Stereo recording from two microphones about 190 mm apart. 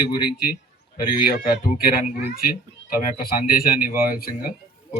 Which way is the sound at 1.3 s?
45° left (ahead or behind).